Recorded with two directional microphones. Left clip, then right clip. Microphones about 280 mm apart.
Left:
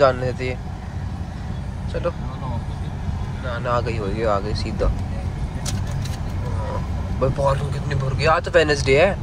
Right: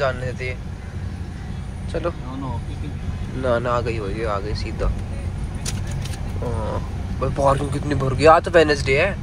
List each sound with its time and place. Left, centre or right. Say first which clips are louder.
0.0 s speech: left 6 dB; centre
3.4 s speech: right 6 dB; centre
3.7 s speech: even; centre
7.2 s speech: right 2 dB; centre